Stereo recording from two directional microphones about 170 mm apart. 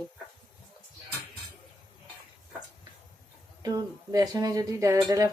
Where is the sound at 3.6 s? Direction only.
20° right (ahead or behind).